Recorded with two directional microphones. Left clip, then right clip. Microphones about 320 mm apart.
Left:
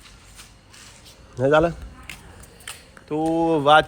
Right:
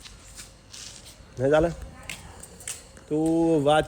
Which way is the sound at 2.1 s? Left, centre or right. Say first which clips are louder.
Right 1 dB; centre.